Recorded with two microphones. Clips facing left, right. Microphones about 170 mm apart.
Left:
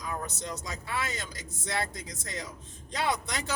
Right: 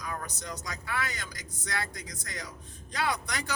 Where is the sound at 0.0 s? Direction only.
25° left (ahead or behind).